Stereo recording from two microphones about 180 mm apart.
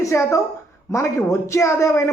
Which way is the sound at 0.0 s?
15° left (ahead or behind).